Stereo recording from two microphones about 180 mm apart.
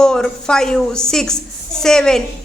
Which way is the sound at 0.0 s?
5° left (ahead or behind).